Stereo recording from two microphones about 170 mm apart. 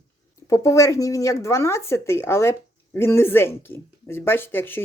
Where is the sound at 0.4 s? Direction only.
20° left (ahead or behind).